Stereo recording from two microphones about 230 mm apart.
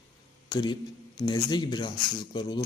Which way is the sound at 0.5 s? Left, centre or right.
Centre.